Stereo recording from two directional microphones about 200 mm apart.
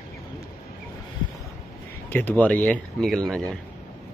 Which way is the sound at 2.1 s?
10° left (ahead or behind).